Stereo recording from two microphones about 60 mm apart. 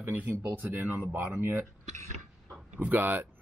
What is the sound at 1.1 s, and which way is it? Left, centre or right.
Speech, right.